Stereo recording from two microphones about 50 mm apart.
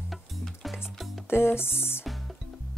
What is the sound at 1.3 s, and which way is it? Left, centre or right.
Speech, left.